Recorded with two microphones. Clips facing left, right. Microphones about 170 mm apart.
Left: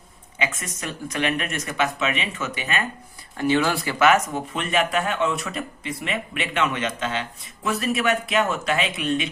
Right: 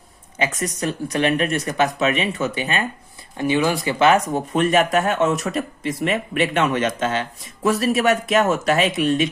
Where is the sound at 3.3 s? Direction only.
15° right (ahead or behind).